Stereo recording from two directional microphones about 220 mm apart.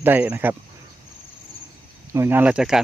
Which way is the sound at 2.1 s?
10° right (ahead or behind).